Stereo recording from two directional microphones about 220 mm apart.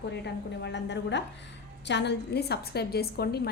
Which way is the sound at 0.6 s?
50° left (ahead or behind).